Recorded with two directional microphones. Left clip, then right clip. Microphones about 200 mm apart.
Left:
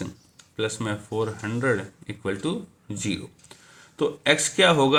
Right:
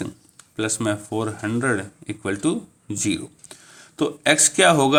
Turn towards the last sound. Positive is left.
turn(degrees=-45)  # may be behind; listen again after turning